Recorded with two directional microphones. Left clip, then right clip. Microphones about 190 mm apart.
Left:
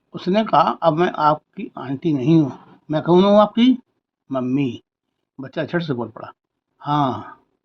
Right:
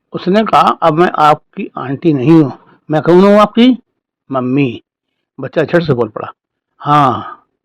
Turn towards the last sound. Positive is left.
turn(degrees=-40)  # may be behind; listen again after turning